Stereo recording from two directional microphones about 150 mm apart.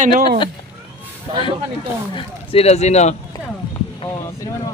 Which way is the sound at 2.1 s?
40° left (ahead or behind).